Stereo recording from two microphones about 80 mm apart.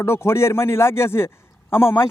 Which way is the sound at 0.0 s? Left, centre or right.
Left.